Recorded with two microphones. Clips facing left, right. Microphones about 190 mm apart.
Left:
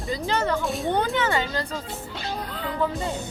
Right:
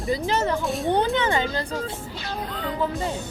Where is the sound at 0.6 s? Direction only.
Centre (ahead or behind).